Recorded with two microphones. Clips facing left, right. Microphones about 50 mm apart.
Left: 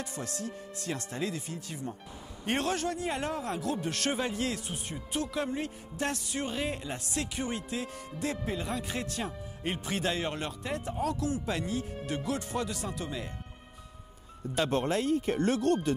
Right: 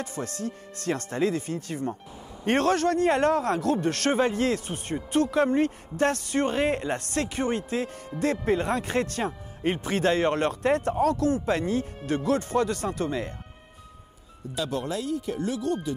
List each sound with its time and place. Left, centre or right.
0.0 s speech: right
14.5 s speech: left